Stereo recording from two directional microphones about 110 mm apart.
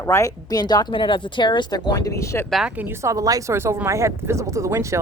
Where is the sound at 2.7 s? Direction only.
20° right (ahead or behind).